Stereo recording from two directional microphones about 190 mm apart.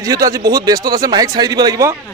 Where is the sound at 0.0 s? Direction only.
15° right (ahead or behind).